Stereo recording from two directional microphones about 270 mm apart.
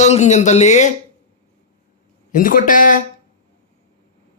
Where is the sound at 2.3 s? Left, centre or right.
Left.